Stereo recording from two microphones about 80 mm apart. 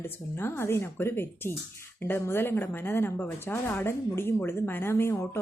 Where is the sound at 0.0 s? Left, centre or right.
Left.